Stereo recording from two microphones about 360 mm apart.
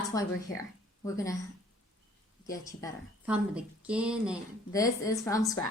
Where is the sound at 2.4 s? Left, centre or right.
Centre.